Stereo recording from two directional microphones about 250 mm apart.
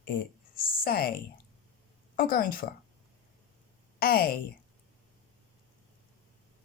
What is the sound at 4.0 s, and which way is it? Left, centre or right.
Speech, left.